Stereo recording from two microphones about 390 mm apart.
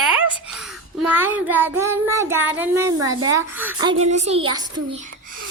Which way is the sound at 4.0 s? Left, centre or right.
Centre.